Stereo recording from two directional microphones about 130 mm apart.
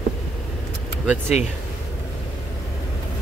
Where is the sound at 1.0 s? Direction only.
15° right (ahead or behind).